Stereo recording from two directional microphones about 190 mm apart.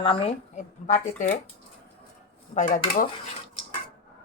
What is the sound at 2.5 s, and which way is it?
Speech, 40° left (ahead or behind).